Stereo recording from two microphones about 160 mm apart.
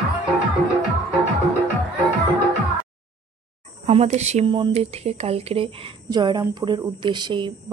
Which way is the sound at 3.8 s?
40° right (ahead or behind).